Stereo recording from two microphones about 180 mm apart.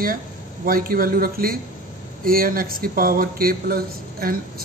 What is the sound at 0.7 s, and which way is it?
A man's voice, 50° right (ahead or behind).